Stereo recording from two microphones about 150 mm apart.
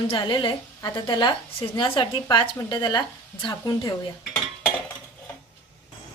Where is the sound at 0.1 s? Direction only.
35° left (ahead or behind).